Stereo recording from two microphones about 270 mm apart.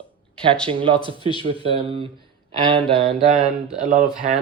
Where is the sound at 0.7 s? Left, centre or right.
Centre.